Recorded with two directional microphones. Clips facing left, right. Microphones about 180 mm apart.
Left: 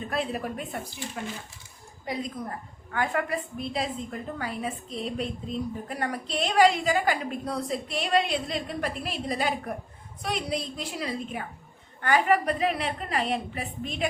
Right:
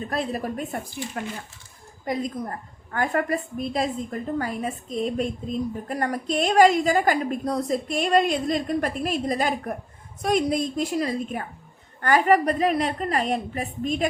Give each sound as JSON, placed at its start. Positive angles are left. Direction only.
{"t": 0.1, "sound": "a woman's voice", "side_deg": -40}
{"t": 2.9, "sound": "a woman's voice", "side_deg": -45}